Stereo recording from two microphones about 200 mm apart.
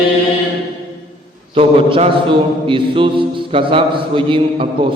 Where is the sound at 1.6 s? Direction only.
30° right (ahead or behind).